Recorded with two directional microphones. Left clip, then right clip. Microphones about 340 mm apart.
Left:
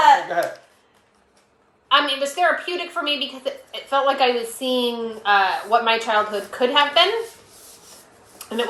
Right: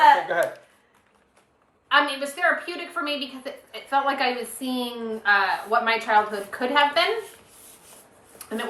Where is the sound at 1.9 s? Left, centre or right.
Centre.